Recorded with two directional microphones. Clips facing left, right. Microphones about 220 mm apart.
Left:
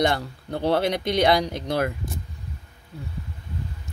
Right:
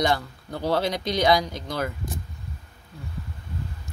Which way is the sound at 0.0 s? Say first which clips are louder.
Left 1 dB; 60° left (ahead or behind).